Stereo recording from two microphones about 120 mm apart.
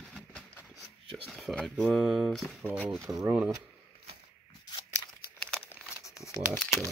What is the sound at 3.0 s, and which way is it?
Speech, 25° right (ahead or behind).